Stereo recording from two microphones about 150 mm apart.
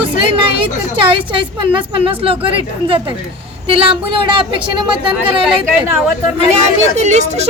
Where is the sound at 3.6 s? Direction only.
35° right (ahead or behind).